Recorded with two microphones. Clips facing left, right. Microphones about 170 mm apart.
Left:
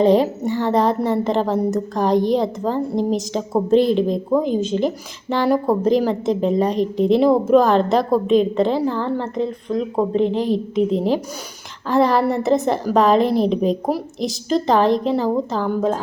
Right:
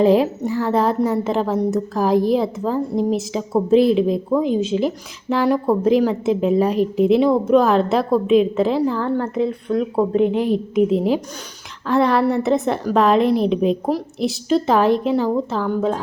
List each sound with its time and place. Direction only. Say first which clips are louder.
0.0 s speech: even; 5° right (ahead or behind)
10.3 s a woman's voice: right 1 dB; 35° left (ahead or behind)
10.8 s speech: right 1 dB; 5° right (ahead or behind)